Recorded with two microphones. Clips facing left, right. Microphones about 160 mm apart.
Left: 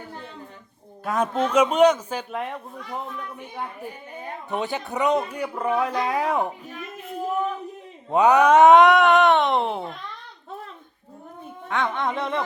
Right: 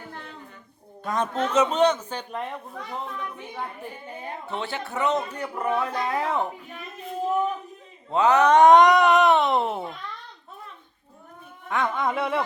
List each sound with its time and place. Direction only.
1.0 s speech: 10° left (ahead or behind)
4.4 s speech: 15° left (ahead or behind)
8.1 s speech: 15° left (ahead or behind); by 10.0 s centre (ahead or behind)
11.7 s speech: centre (ahead or behind)